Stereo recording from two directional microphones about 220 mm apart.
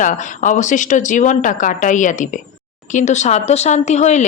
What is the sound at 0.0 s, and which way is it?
Speech, 35° left (ahead or behind).